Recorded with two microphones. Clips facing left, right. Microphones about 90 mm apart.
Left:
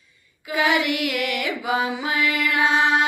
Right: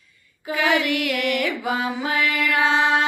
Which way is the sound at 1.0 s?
40° right (ahead or behind).